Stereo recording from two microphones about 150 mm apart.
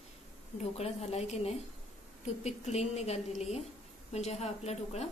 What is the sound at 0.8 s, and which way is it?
A woman's voice, 45° left (ahead or behind).